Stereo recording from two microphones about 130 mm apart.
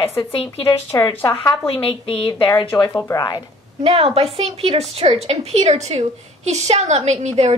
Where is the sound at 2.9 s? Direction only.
30° left (ahead or behind).